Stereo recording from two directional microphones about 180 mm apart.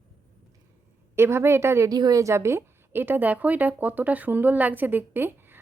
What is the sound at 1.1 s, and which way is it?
A woman's voice, 15° right (ahead or behind).